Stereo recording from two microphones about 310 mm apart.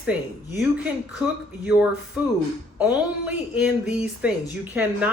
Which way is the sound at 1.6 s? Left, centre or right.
Centre.